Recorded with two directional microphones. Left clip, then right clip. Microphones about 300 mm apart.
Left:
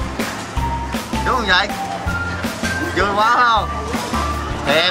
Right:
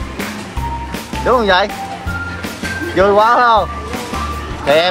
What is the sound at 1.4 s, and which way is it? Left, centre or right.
Speech, centre.